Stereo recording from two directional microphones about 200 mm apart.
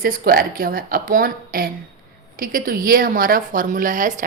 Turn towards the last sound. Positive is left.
turn(degrees=-40)  # may be behind; listen again after turning